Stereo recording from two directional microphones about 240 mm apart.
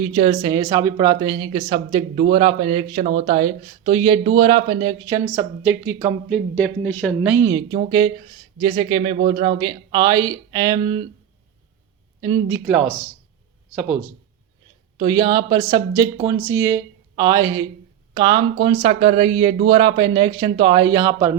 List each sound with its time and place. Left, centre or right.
0.0 s speech: right
6.3 s speech: centre
7.3 s speech: centre
12.2 s speech: centre
14.9 s speech: centre